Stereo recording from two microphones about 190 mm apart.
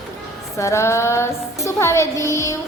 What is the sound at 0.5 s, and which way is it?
Music, 15° left (ahead or behind).